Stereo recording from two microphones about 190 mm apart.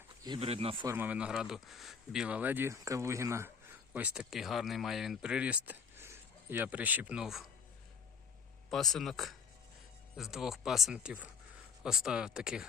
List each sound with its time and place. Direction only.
0.3 s speech: 30° right (ahead or behind)
0.9 s speech: 10° right (ahead or behind)
8.7 s speech: centre (ahead or behind)